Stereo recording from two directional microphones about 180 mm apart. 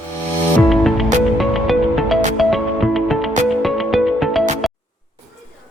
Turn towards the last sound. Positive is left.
turn(degrees=0)  # may be behind; listen again after turning